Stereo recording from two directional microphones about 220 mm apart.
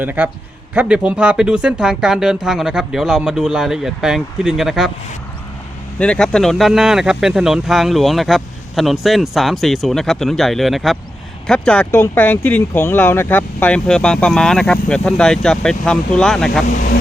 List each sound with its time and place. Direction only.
0.0 s a man's voice: 10° right (ahead or behind)
6.0 s speech: 5° left (ahead or behind)
16.6 s vehicle: 35° left (ahead or behind)